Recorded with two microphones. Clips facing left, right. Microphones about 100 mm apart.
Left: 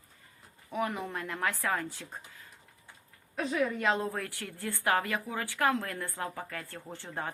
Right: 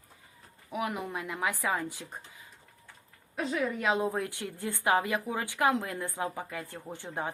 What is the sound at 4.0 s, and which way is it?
Speech, 15° right (ahead or behind).